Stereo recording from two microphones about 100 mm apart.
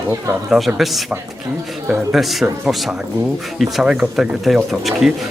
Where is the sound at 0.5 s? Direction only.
Centre (ahead or behind).